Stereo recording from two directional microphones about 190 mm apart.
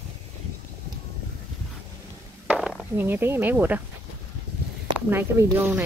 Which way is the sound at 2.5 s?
Centre (ahead or behind).